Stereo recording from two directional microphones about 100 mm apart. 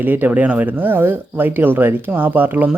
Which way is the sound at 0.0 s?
15° right (ahead or behind).